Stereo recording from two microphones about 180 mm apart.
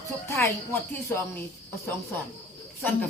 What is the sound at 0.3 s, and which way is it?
Speech, 15° left (ahead or behind).